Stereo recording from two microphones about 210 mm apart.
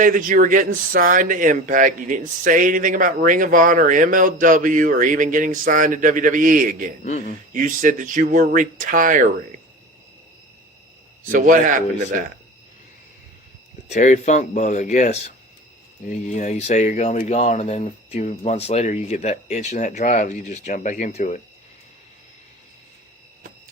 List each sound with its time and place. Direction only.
0.0 s speech: 40° right (ahead or behind)
7.0 s speech: 35° left (ahead or behind)
7.5 s speech: 40° right (ahead or behind)
11.3 s speech: 40° right (ahead or behind)
13.8 s speech: 35° left (ahead or behind)
16.3 s speech: 35° left (ahead or behind)